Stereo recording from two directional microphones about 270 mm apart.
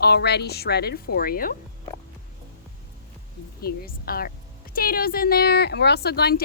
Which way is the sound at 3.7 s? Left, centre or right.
Left.